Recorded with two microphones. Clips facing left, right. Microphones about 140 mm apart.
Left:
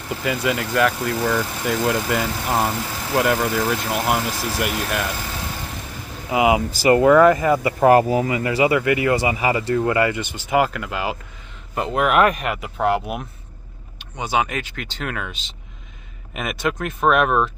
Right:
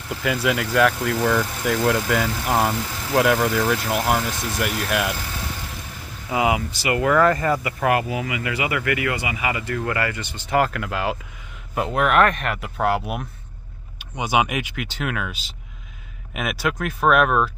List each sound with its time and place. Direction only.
0.1 s speech: centre (ahead or behind)
6.3 s speech: 20° left (ahead or behind)
6.7 s speech: 40° left (ahead or behind)
7.0 s speech: 20° left (ahead or behind)
7.6 s speech: 30° left (ahead or behind)
10.5 s speech: 5° left (ahead or behind)
13.9 s speech: 10° right (ahead or behind)